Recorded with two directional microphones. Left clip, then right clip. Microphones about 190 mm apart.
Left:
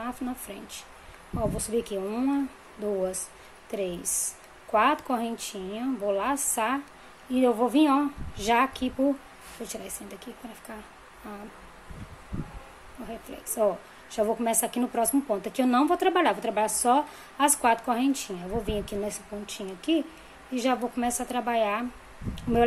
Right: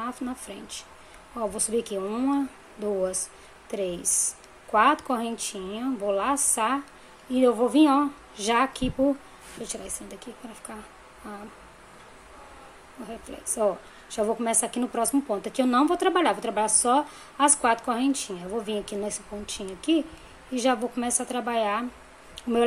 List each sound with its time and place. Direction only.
0.0 s a woman's voice: 5° right (ahead or behind)
13.1 s a woman's voice: 5° right (ahead or behind)